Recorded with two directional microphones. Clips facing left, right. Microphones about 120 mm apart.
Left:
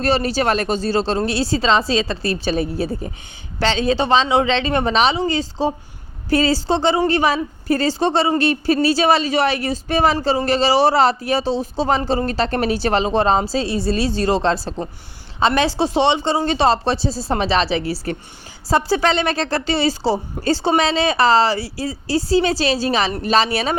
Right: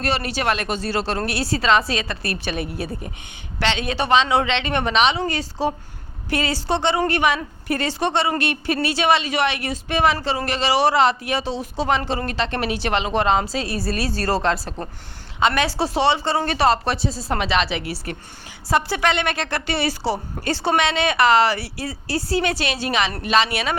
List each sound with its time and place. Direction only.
0.0 s speech: 35° left (ahead or behind)